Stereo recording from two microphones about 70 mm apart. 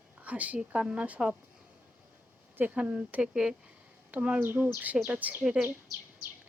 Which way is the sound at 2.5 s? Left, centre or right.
Right.